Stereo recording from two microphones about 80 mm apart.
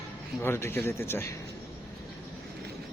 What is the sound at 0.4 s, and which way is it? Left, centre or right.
Speech, left.